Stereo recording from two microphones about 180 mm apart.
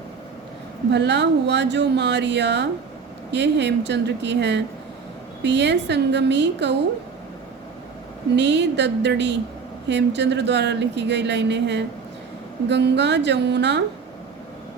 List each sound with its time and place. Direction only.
0.9 s speech: 75° right (ahead or behind)
8.4 s speech: 75° right (ahead or behind)